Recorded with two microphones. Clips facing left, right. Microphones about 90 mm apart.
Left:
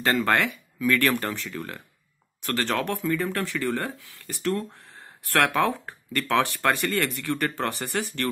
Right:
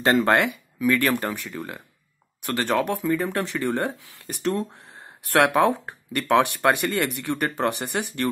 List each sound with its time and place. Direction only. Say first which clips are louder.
0.0 s speech: right 4 dB; 20° right (ahead or behind)